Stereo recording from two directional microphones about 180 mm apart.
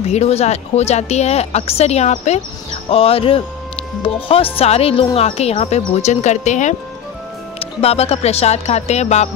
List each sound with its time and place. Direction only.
0.0 s speech: 35° left (ahead or behind)